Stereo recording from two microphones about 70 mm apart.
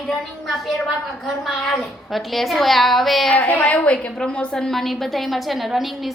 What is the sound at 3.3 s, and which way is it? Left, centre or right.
A woman's voice, left.